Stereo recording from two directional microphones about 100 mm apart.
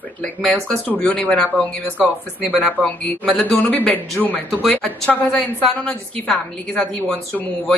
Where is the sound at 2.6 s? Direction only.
5° left (ahead or behind).